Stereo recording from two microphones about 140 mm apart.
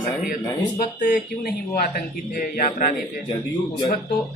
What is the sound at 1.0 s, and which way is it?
Speech, 80° left.